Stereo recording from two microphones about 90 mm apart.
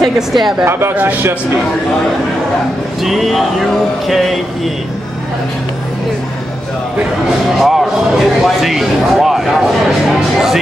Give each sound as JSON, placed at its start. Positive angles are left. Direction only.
{"t": 0.0, "sound": "speech", "side_deg": -5}
{"t": 0.7, "sound": "speech", "side_deg": -25}
{"t": 3.0, "sound": "speech", "side_deg": 0}
{"t": 7.5, "sound": "speech", "side_deg": -5}